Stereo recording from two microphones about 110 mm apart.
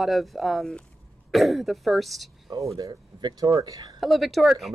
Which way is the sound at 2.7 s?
35° right (ahead or behind).